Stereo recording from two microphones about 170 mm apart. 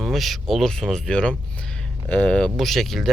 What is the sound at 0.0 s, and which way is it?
Speech, centre (ahead or behind).